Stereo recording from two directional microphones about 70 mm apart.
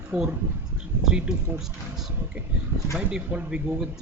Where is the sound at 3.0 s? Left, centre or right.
Centre.